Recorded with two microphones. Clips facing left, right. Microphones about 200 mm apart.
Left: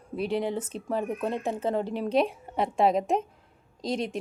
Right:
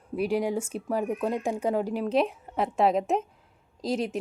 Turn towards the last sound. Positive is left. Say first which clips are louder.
# right 2 dB
turn(degrees=-5)  # may be behind; listen again after turning